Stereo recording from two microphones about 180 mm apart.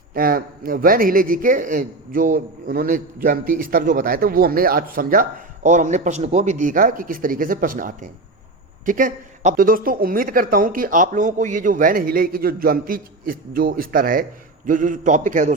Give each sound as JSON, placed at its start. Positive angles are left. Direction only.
{"t": 0.1, "sound": "speech", "side_deg": -55}